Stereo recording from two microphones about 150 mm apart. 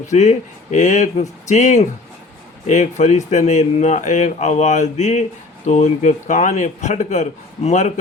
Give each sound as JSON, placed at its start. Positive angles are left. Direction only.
{"t": 0.1, "sound": "speech", "side_deg": 50}